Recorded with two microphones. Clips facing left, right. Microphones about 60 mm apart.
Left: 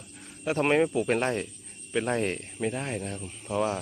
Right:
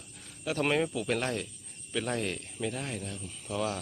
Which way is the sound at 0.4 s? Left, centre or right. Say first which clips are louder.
Left 5 dB; left.